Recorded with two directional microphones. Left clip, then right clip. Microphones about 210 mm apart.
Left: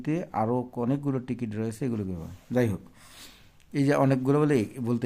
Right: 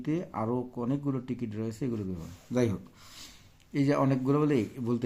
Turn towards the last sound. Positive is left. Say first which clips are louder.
# left 3 dB
turn(degrees=30)  # may be behind; listen again after turning